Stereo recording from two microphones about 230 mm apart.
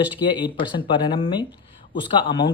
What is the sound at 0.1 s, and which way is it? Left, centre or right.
Speech, left.